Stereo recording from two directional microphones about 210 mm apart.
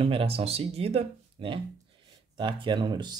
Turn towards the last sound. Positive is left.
turn(degrees=-20)  # may be behind; listen again after turning